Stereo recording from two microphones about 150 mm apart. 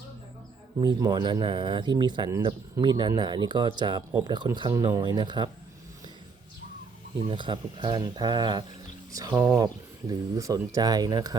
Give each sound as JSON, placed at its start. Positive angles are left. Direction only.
{"t": 0.8, "sound": "speech", "side_deg": -30}
{"t": 7.3, "sound": "speech", "side_deg": -30}